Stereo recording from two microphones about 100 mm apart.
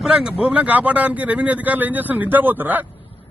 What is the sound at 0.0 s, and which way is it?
Speech, 10° right (ahead or behind).